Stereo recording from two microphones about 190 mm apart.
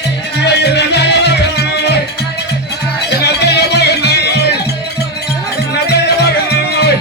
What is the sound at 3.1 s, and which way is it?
Music, 60° left (ahead or behind).